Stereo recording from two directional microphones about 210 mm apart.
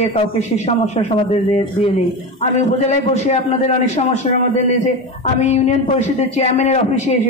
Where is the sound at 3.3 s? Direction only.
30° left (ahead or behind).